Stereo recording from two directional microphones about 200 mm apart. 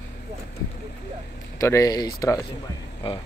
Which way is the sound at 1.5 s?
15° left (ahead or behind).